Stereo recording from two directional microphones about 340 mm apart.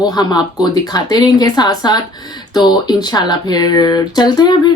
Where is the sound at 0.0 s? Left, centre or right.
Centre.